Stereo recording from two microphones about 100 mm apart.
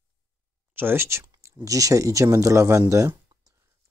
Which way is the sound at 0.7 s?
25° right (ahead or behind).